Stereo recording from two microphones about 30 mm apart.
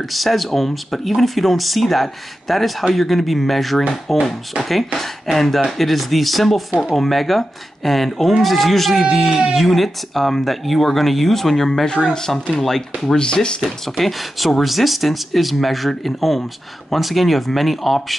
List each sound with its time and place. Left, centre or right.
0.1 s speech: centre
13.1 s speech: left
13.6 s speech: centre